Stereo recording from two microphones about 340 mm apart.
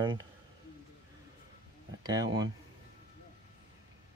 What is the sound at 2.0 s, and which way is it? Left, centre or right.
Speech, centre.